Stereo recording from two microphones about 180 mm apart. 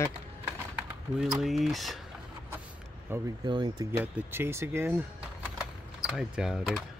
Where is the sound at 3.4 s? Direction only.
25° right (ahead or behind).